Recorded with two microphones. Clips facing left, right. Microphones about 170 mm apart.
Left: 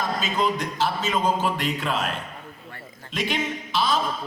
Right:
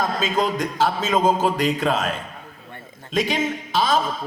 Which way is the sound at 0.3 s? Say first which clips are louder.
Right 3 dB; 45° right (ahead or behind).